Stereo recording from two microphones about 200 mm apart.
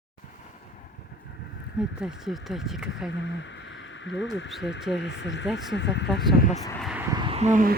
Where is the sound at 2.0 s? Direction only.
5° right (ahead or behind).